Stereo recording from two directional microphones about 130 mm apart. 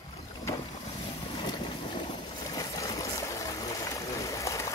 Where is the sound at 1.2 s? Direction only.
35° left (ahead or behind).